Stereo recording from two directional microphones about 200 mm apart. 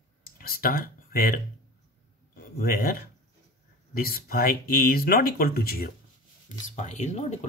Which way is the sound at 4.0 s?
50° left (ahead or behind).